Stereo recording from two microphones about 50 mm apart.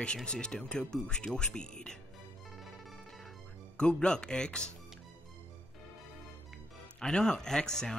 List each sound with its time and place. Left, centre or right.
0.0 s speech: centre
3.7 s speech: centre
7.0 s speech: centre